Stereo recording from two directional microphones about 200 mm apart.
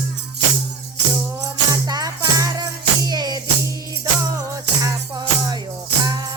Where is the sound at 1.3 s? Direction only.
15° right (ahead or behind).